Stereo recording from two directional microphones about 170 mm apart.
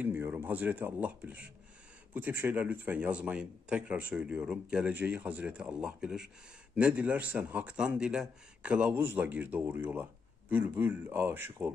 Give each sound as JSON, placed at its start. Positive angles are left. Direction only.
{"t": 0.0, "sound": "speech", "side_deg": -10}